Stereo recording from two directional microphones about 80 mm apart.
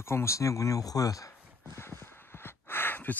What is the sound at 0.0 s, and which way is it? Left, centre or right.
Speech, left.